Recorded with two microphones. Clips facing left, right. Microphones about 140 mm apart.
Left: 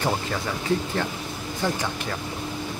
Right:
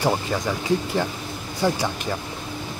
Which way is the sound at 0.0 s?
15° right (ahead or behind).